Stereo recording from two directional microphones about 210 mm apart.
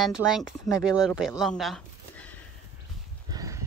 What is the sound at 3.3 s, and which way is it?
Horse, 15° right (ahead or behind).